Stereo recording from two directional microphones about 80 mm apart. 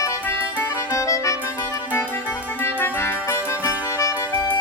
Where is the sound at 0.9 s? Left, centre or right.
Left.